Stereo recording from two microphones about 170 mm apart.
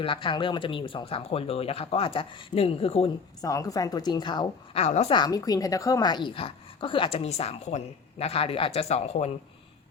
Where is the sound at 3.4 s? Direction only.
20° left (ahead or behind).